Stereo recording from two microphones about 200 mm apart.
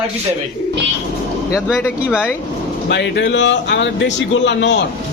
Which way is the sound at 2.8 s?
60° left (ahead or behind).